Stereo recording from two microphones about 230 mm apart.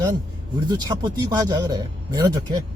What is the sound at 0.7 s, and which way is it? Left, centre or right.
Speech, centre.